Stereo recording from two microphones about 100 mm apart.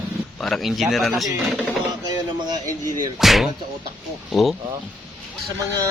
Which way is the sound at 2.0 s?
40° right (ahead or behind).